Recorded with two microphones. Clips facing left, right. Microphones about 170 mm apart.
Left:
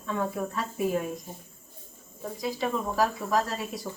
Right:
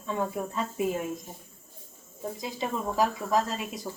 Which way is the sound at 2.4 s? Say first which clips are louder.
Left 4 dB; 20° right (ahead or behind).